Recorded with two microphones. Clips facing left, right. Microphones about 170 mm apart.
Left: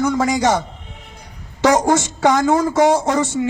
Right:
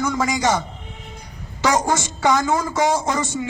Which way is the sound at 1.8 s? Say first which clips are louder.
Left 4 dB; 60° left (ahead or behind).